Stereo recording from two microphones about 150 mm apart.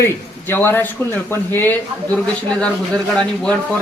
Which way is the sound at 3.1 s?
5° left (ahead or behind).